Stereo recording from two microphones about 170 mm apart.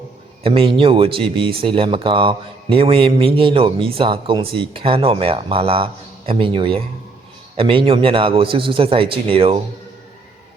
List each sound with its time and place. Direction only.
0.4 s a man's voice: 30° right (ahead or behind)